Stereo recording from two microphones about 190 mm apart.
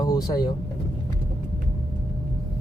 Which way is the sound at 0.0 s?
20° left (ahead or behind).